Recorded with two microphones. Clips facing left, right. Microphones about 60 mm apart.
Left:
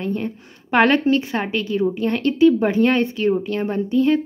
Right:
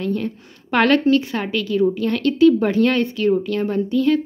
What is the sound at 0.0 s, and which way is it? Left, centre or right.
Speech, left.